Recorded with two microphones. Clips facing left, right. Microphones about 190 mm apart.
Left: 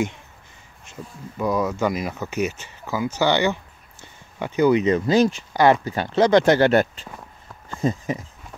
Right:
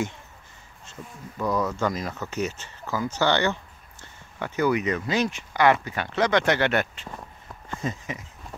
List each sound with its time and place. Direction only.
1.4 s speech: 10° left (ahead or behind); by 8.3 s 30° left (ahead or behind)